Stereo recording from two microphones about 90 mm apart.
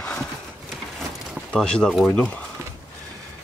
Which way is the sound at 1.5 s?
10° left (ahead or behind).